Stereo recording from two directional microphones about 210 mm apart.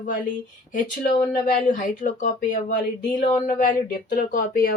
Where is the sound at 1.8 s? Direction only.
40° left (ahead or behind).